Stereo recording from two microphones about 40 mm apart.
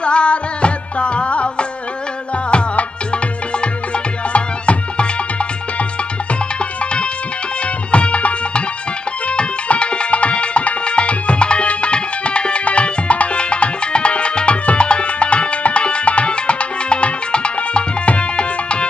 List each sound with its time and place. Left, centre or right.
0.0 s music: left
6.6 s tabla: left
7.6 s music: left